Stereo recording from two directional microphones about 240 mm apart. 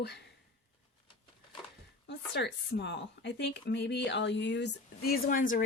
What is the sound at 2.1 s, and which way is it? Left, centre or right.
Speech, left.